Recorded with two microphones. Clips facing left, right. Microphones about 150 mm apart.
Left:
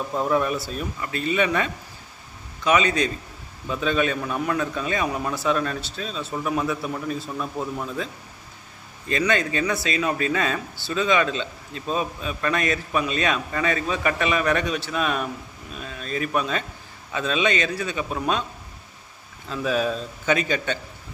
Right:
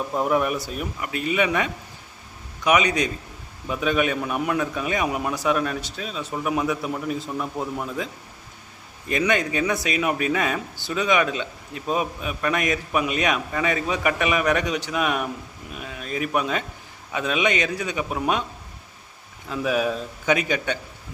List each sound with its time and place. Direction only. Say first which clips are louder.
0.1 s a man's voice: even; 15° right (ahead or behind)
2.6 s a man's voice: even; 15° right (ahead or behind)
19.5 s a man's voice: right 1 dB; 10° right (ahead or behind)